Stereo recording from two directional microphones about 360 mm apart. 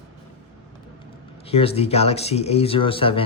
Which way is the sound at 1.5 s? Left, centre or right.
Centre.